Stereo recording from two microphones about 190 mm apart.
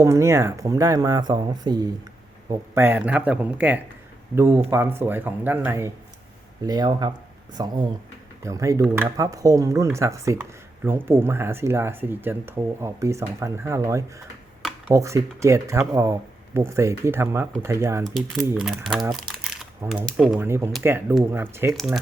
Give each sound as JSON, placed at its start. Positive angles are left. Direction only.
{"t": 0.0, "sound": "speech", "side_deg": -15}
{"t": 6.7, "sound": "speech", "side_deg": -20}
{"t": 18.5, "sound": "speech", "side_deg": 0}
{"t": 21.7, "sound": "speech", "side_deg": 0}